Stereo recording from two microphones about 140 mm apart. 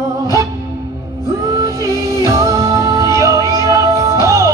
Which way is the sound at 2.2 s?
20° right (ahead or behind).